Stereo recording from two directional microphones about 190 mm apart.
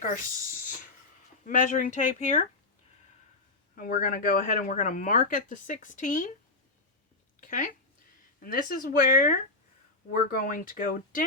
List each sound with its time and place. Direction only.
0.0 s speech: 45° left (ahead or behind)
1.5 s speech: 45° left (ahead or behind)
3.8 s speech: 45° left (ahead or behind)
7.4 s speech: 45° left (ahead or behind)